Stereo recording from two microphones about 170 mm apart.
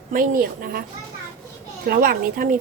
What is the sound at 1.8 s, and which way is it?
Speech, 55° right (ahead or behind).